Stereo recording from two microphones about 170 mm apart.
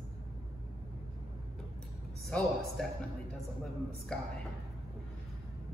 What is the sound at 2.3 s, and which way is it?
Speech, 5° left (ahead or behind).